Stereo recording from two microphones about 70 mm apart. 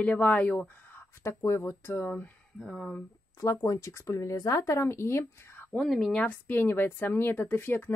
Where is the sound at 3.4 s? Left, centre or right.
Left.